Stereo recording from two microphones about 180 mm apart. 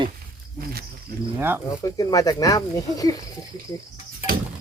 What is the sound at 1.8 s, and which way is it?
Speech, 20° left (ahead or behind).